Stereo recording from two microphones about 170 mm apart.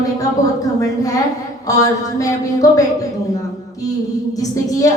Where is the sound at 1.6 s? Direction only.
20° left (ahead or behind).